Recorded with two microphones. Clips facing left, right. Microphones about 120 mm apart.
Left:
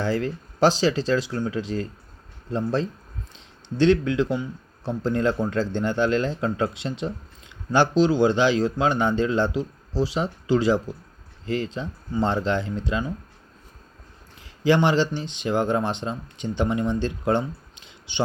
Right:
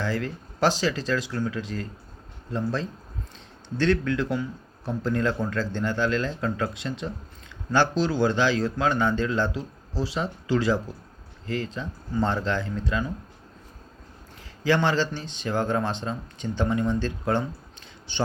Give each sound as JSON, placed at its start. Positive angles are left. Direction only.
{"t": 0.0, "sound": "speech", "side_deg": 30}
{"t": 3.8, "sound": "speech", "side_deg": 20}
{"t": 14.6, "sound": "speech", "side_deg": 20}